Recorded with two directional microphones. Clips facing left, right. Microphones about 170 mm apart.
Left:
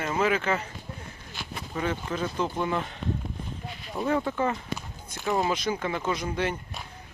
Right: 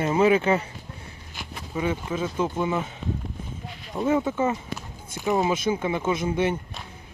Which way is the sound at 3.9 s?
5° right (ahead or behind).